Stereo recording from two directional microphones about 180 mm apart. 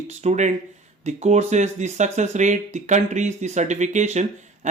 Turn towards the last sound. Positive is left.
turn(degrees=-40)  # may be behind; listen again after turning